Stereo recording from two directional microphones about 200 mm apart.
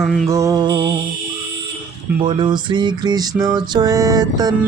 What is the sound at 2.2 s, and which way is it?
Music, 20° right (ahead or behind).